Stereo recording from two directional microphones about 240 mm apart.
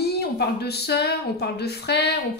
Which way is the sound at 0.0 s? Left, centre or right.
Left.